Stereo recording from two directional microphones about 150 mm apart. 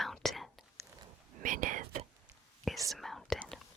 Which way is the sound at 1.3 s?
60° right (ahead or behind).